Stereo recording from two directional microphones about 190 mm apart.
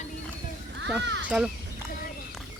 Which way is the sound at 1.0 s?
70° right (ahead or behind).